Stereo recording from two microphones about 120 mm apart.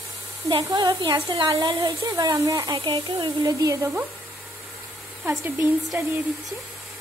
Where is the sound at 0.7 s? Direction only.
35° right (ahead or behind).